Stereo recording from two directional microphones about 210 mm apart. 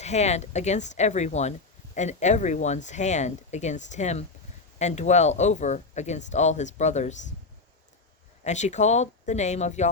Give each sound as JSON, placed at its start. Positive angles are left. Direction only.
{"t": 0.0, "sound": "speech", "side_deg": 30}
{"t": 8.4, "sound": "speech", "side_deg": 35}